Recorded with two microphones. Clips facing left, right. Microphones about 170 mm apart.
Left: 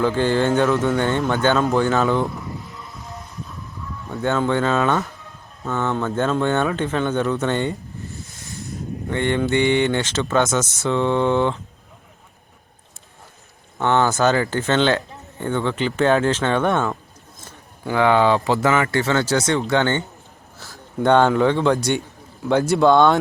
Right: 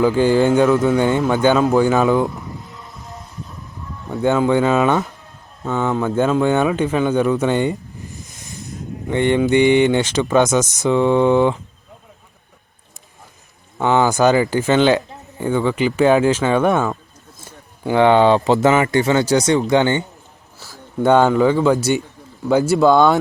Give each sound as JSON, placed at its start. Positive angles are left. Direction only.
{"t": 0.0, "sound": "speech", "side_deg": -10}
{"t": 4.1, "sound": "speech", "side_deg": -15}
{"t": 7.4, "sound": "a sound", "side_deg": -10}
{"t": 9.0, "sound": "speech", "side_deg": -15}
{"t": 13.7, "sound": "speech", "side_deg": -10}
{"t": 17.8, "sound": "speech", "side_deg": -25}